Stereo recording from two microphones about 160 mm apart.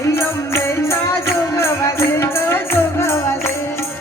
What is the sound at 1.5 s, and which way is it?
Music, 15° left (ahead or behind).